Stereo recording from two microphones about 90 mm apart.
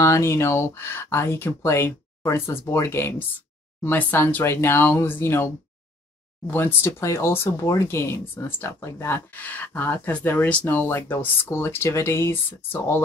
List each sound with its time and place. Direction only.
0.0 s speech: 30° left (ahead or behind)